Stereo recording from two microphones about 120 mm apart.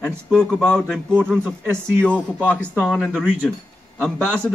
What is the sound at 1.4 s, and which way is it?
Speech, 20° right (ahead or behind).